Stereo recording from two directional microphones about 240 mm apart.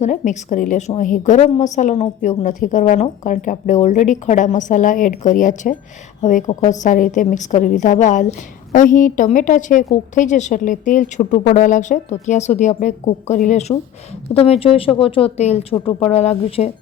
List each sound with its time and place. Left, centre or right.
0.0 s a woman's voice: left